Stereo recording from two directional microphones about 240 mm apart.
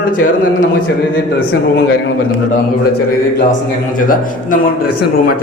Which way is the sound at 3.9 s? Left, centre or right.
Left.